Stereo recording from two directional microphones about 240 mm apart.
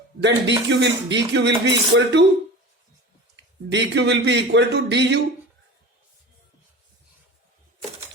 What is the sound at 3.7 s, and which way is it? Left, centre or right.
A man's voice, right.